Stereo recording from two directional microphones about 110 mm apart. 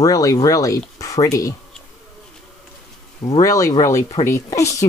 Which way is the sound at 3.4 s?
30° left (ahead or behind).